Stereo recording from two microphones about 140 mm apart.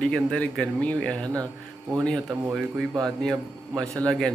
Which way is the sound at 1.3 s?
25° right (ahead or behind).